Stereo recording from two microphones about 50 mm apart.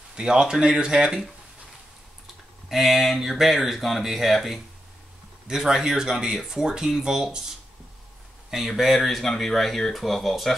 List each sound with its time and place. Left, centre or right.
0.1 s speech: centre
2.7 s speech: centre
5.5 s speech: centre